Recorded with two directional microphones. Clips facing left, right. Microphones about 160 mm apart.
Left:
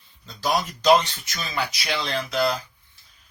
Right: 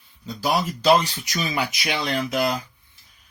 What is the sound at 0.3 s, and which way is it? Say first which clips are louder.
Speech: right 1 dB; 5° right (ahead or behind).